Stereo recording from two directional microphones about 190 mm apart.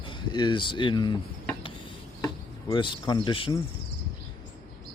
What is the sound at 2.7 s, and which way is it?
Speech, 25° left (ahead or behind).